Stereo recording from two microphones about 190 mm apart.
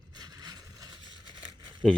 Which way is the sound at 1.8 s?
Centre (ahead or behind).